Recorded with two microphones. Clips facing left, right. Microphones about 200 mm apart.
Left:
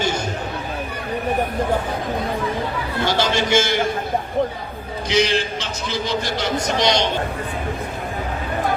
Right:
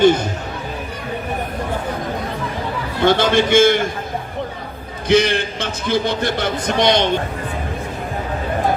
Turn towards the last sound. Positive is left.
turn(degrees=-55)  # may be behind; listen again after turning